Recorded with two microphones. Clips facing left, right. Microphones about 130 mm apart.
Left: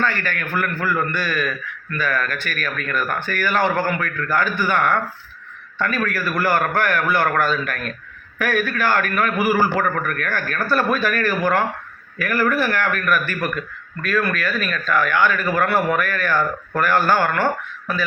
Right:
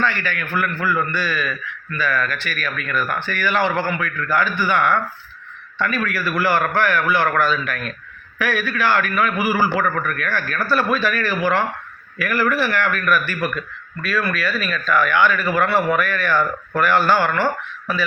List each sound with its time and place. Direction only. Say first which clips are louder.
0.0 s speech: even; 45° left (ahead or behind)